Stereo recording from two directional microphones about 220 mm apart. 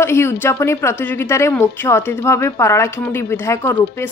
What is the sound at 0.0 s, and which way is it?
A woman's voice, 10° left (ahead or behind).